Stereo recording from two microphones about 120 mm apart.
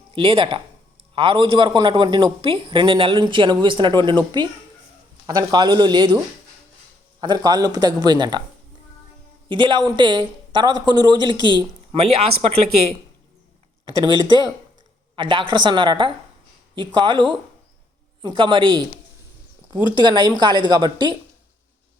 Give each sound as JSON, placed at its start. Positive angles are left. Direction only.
{"t": 0.1, "sound": "a woman's voice", "side_deg": -45}
{"t": 7.2, "sound": "a man's voice", "side_deg": -35}
{"t": 9.5, "sound": "a man's voice", "side_deg": -40}
{"t": 11.9, "sound": "speech", "side_deg": -60}
{"t": 14.0, "sound": "a man's voice", "side_deg": -35}